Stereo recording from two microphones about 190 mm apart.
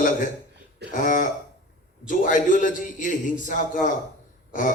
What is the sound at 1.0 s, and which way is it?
A man's voice, 45° left (ahead or behind).